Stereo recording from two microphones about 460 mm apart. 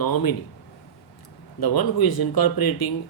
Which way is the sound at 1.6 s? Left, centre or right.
Left.